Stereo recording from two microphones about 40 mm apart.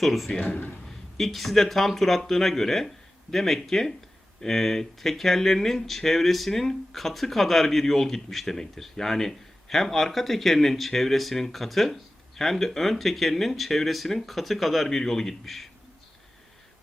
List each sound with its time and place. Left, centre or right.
0.0 s speech: centre
0.3 s speech: left
1.1 s a man's voice: centre